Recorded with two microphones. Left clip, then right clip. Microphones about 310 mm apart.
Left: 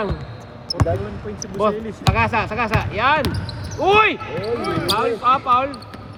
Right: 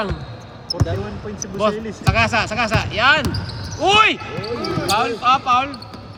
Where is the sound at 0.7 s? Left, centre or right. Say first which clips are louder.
Left 1 dB; centre.